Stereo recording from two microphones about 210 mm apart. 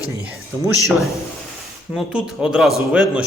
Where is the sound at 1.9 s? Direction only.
5° right (ahead or behind).